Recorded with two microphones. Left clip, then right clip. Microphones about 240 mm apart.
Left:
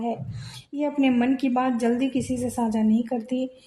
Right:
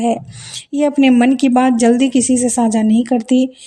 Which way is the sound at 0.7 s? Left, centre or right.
Right.